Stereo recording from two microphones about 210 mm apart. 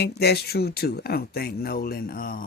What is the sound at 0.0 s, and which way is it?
Speech, 50° left (ahead or behind).